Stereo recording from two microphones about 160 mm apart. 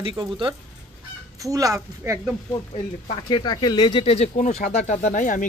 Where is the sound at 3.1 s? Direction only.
30° left (ahead or behind); by 5.4 s 55° left (ahead or behind).